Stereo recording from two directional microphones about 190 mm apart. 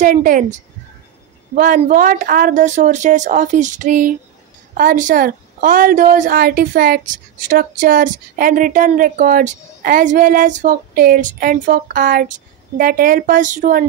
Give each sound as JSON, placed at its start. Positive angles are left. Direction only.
{"t": 0.0, "sound": "a woman's voice", "side_deg": -45}